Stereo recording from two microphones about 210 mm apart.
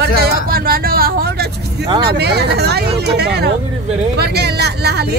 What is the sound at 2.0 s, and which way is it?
Speech, 50° right (ahead or behind).